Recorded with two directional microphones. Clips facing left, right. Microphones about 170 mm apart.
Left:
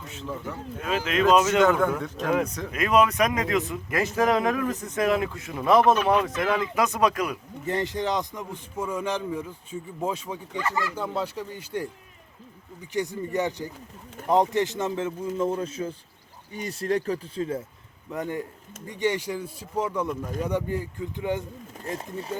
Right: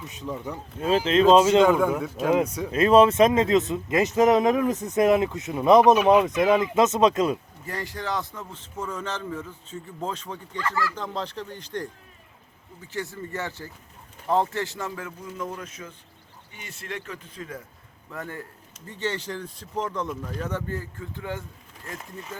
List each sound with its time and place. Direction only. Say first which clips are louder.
0.1 s a man's voice: even; 15° right (ahead or behind)
0.8 s speech: right 5 dB; 30° right (ahead or behind)
1.6 s a man's voice: right 1 dB; 10° right (ahead or behind)
2.7 s speech: right 5 dB; 30° right (ahead or behind)
7.7 s speech: left 4 dB; 20° left (ahead or behind)
18.1 s speech: left 6 dB; 15° left (ahead or behind)
21.8 s speech: left 6 dB; 35° left (ahead or behind)